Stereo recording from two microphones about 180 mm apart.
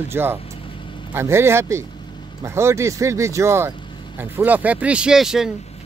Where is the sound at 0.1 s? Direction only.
10° right (ahead or behind).